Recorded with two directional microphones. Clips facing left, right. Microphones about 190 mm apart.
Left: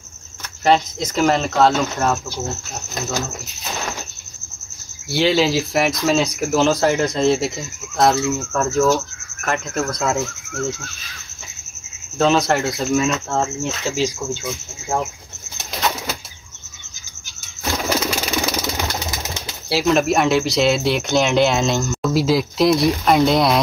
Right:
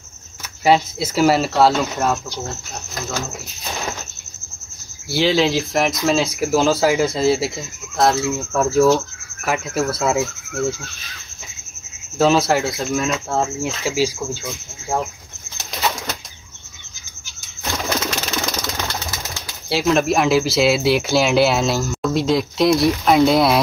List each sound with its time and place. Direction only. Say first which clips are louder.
0.7 s speech: right 1 dB; 5° right (ahead or behind)
2.4 s speech: left 2 dB; 20° left (ahead or behind)
5.1 s speech: even; centre (ahead or behind)
12.2 s speech: right 1 dB; 5° right (ahead or behind)
17.8 s a sound: left 2 dB; 10° left (ahead or behind)
19.7 s speech: even; centre (ahead or behind)